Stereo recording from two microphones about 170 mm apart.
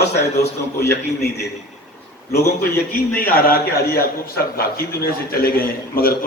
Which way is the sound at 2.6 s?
15° left (ahead or behind).